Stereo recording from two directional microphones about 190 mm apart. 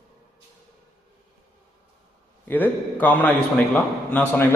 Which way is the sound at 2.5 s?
10° left (ahead or behind).